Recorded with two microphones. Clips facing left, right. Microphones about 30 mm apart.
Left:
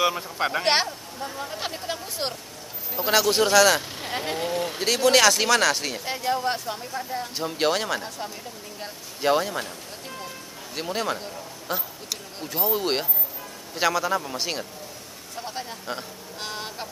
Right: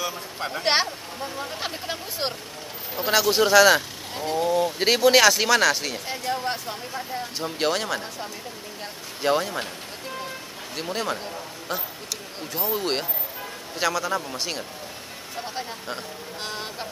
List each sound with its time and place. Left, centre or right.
0.0 s speech: left
0.7 s speech: centre
4.2 s speech: left
4.7 s speech: right
5.0 s speech: centre
10.8 s speech: centre